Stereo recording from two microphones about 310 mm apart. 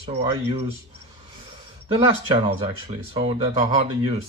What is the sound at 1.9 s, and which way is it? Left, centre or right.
Speech, centre.